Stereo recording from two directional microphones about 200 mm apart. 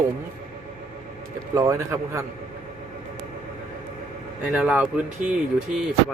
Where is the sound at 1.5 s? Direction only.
15° right (ahead or behind).